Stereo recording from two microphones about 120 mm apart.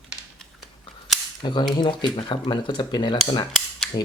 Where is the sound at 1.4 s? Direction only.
40° left (ahead or behind).